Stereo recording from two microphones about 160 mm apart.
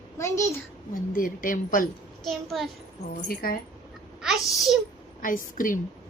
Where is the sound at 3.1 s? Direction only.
65° left (ahead or behind).